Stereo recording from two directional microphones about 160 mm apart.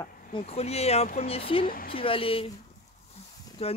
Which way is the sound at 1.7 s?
60° left (ahead or behind).